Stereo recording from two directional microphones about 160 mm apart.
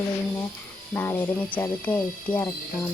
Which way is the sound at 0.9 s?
10° left (ahead or behind).